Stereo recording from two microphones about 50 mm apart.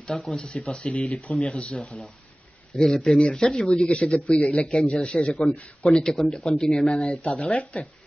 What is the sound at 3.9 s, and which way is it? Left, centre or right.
Speech, left.